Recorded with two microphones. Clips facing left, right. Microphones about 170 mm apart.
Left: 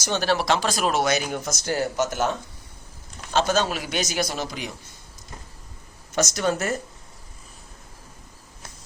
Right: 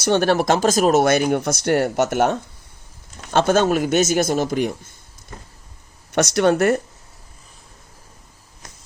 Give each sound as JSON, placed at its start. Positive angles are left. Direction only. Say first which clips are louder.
{"t": 0.0, "sound": "speech", "louder": "right 7 dB", "side_deg": -55}
{"t": 3.3, "sound": "speech", "louder": "right 6 dB", "side_deg": -55}
{"t": 6.1, "sound": "speech", "louder": "right 7 dB", "side_deg": -65}